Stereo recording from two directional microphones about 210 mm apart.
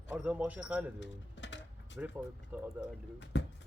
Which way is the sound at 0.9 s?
60° left (ahead or behind).